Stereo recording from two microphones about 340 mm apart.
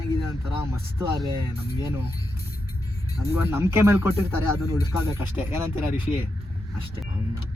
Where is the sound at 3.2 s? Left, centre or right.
Centre.